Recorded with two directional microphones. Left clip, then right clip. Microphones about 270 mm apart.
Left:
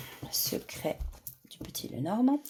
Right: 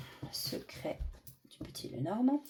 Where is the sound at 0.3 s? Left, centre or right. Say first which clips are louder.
Left 6 dB; left.